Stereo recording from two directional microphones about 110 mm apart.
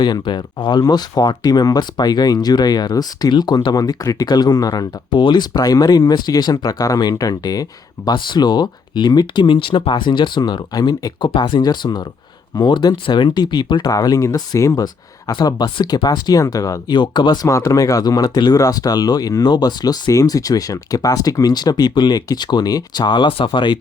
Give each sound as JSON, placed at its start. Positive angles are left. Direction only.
{"t": 0.0, "sound": "speech", "side_deg": 40}
{"t": 11.3, "sound": "speech", "side_deg": 50}
{"t": 15.3, "sound": "speech", "side_deg": 40}